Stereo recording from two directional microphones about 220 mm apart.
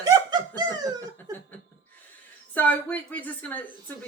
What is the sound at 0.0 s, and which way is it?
Laughter, 20° right (ahead or behind).